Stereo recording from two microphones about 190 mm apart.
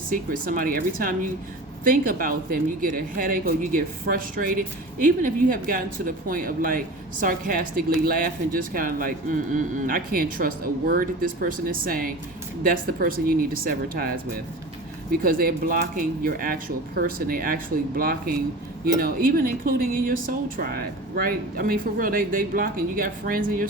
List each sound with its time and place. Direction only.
0.1 s speech: 45° right (ahead or behind)
15.2 s speech: 50° right (ahead or behind)